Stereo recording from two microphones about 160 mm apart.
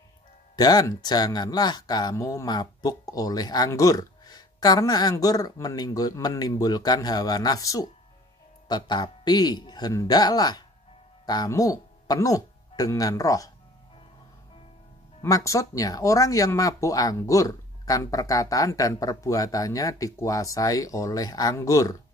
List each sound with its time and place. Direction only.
0.6 s speech: 25° left (ahead or behind)
15.2 s speech: 20° left (ahead or behind)